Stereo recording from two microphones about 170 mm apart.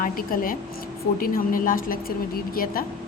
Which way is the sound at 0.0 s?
60° left (ahead or behind).